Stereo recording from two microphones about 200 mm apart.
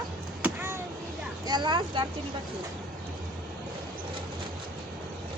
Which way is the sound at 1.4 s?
20° right (ahead or behind).